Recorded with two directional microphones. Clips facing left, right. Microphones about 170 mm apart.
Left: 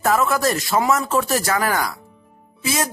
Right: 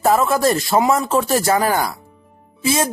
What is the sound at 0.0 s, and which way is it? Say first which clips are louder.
Speech: right 3 dB; 30° right (ahead or behind).